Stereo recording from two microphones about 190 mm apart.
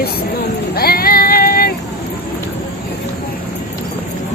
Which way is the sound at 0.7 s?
50° left (ahead or behind).